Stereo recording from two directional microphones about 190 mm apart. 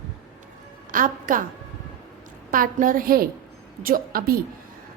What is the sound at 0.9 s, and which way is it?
Speech, 45° right (ahead or behind).